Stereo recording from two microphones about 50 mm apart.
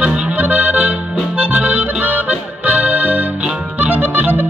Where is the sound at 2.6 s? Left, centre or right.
Right.